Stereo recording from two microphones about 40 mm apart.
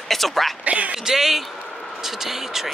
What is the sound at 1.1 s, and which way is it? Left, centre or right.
Speech, centre.